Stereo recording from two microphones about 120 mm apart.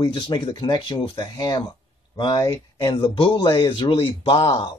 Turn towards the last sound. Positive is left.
turn(degrees=40)  # may be behind; listen again after turning